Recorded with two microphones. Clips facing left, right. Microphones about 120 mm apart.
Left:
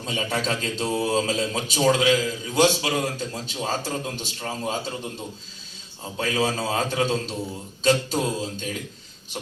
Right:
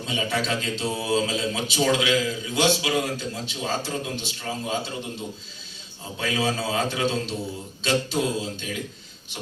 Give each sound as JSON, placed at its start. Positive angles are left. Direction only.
{"t": 0.0, "sound": "a man's voice", "side_deg": 40}
{"t": 6.1, "sound": "a man's voice", "side_deg": 40}